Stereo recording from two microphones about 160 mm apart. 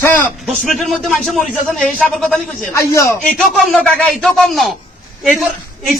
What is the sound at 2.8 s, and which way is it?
Speech, 20° left (ahead or behind).